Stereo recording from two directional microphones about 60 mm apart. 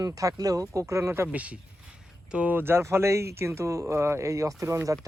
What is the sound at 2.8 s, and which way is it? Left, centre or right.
Speech, right.